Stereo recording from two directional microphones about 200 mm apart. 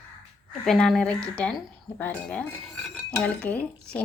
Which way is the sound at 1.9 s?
10° left (ahead or behind).